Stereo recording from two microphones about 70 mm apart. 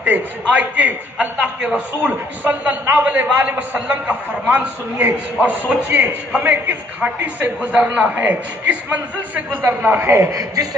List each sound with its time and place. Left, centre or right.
0.0 s a man's voice: centre
7.6 s a man's voice: centre
10.1 s a man's voice: right